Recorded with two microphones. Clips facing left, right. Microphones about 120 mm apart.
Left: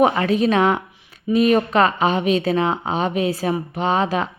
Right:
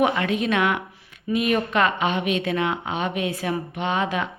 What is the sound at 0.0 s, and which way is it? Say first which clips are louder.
Speech: left 5 dB; 35° left (ahead or behind).